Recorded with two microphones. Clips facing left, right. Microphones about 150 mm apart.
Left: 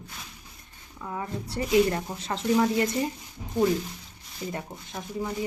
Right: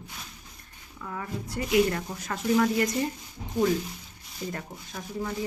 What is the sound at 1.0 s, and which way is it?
Speech, 20° left (ahead or behind).